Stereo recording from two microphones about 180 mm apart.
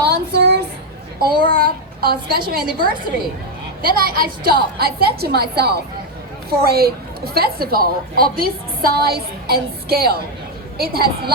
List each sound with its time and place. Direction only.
0.0 s a sound: 65° right (ahead or behind)
1.2 s a woman's voice: 55° right (ahead or behind)
3.8 s a woman's voice: 55° right (ahead or behind)